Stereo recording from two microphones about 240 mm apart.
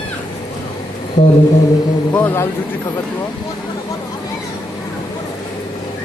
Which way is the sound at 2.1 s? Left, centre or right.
Centre.